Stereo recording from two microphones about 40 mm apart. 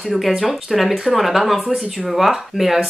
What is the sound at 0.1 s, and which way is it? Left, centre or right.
Speech, centre.